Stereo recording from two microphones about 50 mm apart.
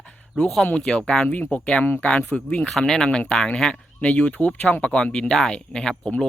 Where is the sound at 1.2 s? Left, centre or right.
Left.